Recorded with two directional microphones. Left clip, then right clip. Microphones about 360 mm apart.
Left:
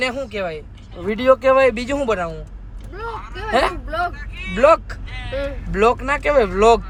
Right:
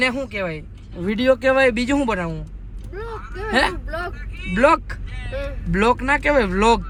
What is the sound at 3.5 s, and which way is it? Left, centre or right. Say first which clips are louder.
Speech: left 2 dB; right.